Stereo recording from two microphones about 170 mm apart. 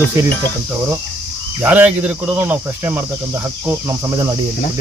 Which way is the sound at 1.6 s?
10° right (ahead or behind).